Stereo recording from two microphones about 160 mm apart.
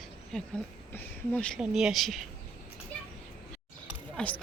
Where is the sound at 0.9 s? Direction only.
10° left (ahead or behind).